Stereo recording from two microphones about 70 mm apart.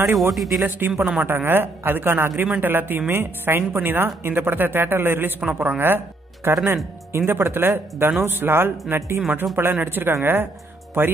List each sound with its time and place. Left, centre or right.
0.3 s speech: centre
0.7 s a woman's voice: right